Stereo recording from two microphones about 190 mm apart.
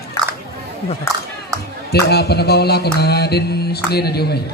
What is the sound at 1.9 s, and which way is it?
Mantra, 55° left (ahead or behind).